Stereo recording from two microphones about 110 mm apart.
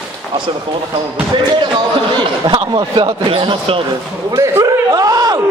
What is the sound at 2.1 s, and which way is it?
Speech, 45° right (ahead or behind).